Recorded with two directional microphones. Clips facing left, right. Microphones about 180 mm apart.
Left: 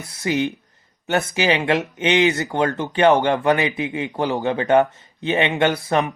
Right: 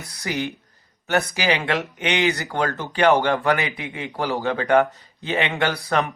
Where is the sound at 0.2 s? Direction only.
20° left (ahead or behind).